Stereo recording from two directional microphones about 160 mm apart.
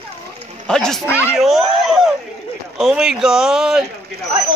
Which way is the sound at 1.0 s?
15° left (ahead or behind).